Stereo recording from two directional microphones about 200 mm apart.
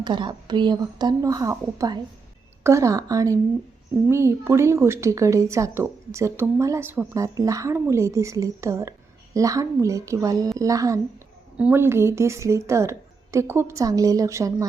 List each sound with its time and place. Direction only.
0.0 s a woman's voice: 20° right (ahead or behind)